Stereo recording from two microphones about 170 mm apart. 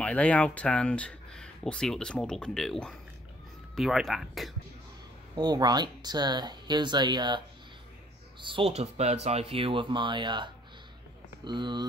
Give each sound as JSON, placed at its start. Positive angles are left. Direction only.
{"t": 0.0, "sound": "speech", "side_deg": 10}
{"t": 5.3, "sound": "speech", "side_deg": -25}